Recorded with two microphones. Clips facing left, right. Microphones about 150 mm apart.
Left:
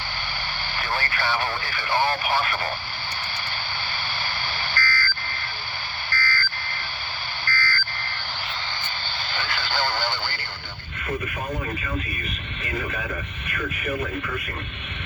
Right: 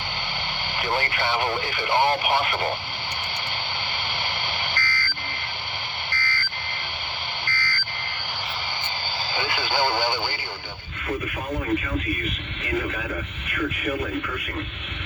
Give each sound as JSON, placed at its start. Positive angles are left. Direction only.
{"t": 0.8, "sound": "speech", "side_deg": -20}
{"t": 4.7, "sound": "a sound", "side_deg": -20}
{"t": 9.3, "sound": "speech", "side_deg": -15}